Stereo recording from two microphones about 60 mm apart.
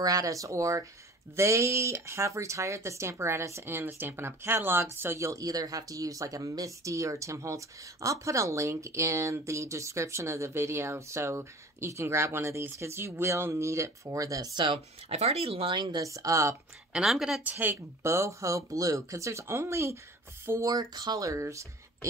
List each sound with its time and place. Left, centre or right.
0.0 s speech: right
1.3 s a woman's voice: right
5.2 s speech: right
16.0 s speech: right
16.9 s a woman's voice: centre
17.4 s a woman's voice: right
18.0 s speech: right
20.6 s speech: right
21.4 s speech: right